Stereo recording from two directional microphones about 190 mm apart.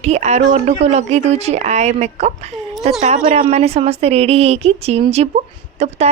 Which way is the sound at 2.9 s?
35° right (ahead or behind).